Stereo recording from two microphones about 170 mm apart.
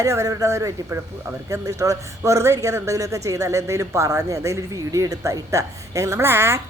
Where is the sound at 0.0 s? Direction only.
20° right (ahead or behind).